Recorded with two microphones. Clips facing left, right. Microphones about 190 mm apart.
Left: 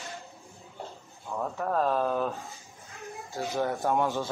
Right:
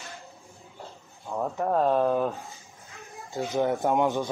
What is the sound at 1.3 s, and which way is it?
Speech, 15° right (ahead or behind).